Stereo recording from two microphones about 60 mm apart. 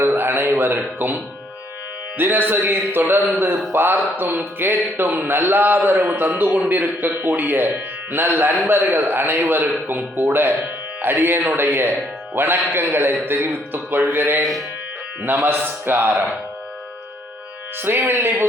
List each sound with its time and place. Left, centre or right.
0.0 s a man's voice: right
17.8 s a man's voice: right